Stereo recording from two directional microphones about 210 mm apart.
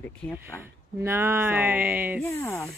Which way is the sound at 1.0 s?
10° right (ahead or behind).